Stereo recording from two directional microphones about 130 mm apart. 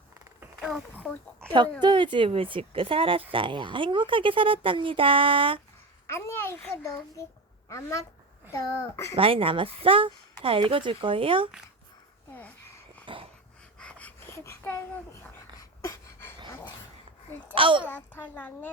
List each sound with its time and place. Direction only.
0.6 s a sound: 5° right (ahead or behind)
1.0 s a child's voice: 10° left (ahead or behind)
1.8 s a woman's voice: 40° right (ahead or behind)
6.1 s speech: 20° left (ahead or behind)
9.1 s speech: 45° right (ahead or behind)
13.1 s wheeze: 40° right (ahead or behind)
13.7 s a sound: 10° left (ahead or behind)
17.5 s speech: 40° right (ahead or behind)
17.8 s a child's voice: 15° left (ahead or behind)